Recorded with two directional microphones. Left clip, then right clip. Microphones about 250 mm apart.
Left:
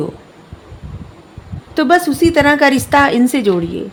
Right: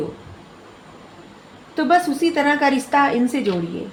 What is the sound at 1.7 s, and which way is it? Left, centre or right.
A woman's voice, left.